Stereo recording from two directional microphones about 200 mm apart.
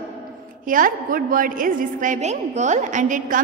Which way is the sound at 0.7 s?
45° right (ahead or behind).